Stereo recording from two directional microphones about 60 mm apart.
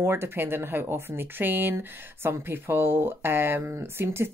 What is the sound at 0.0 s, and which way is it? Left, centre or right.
Speech, right.